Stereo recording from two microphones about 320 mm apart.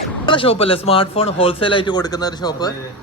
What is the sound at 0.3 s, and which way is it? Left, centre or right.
Speech, centre.